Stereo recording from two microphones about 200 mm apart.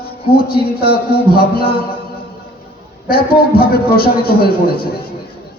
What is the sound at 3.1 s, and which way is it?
A man's voice, 50° left (ahead or behind).